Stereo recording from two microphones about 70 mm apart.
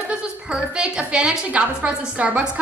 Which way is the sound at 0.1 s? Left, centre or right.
Centre.